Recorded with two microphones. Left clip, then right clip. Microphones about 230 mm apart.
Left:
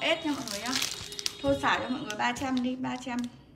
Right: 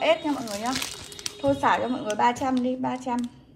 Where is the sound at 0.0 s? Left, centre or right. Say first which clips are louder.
Right 6 dB; centre.